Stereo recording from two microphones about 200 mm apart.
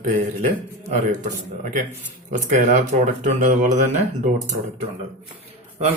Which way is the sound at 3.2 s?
40° right (ahead or behind).